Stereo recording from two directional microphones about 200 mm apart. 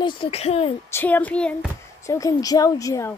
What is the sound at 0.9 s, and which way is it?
Speech, 10° left (ahead or behind).